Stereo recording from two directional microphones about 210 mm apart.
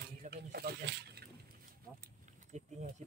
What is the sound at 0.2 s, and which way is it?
Speech, 50° right (ahead or behind).